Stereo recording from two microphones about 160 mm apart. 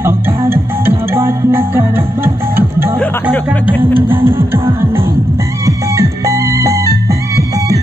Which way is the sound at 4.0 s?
15° right (ahead or behind).